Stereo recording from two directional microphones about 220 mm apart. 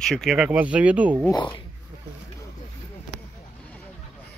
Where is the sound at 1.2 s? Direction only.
15° left (ahead or behind).